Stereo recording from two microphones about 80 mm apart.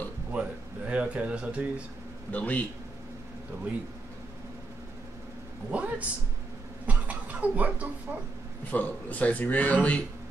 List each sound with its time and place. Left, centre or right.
0.3 s speech: centre
2.3 s a man's voice: centre
5.7 s a man's voice: centre
8.6 s speech: centre